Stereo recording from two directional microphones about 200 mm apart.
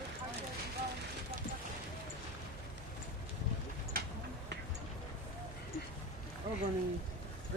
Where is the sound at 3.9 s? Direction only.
50° right (ahead or behind).